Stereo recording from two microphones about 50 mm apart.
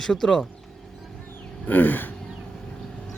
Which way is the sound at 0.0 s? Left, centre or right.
Centre.